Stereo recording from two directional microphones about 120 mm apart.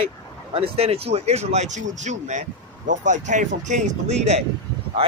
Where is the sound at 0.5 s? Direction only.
55° right (ahead or behind); by 2.4 s 80° right.